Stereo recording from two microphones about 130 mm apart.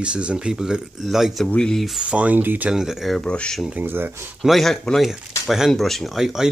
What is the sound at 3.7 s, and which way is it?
Speech, 15° right (ahead or behind).